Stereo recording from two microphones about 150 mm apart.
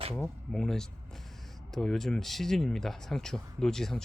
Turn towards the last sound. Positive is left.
turn(degrees=5)  # may be behind; listen again after turning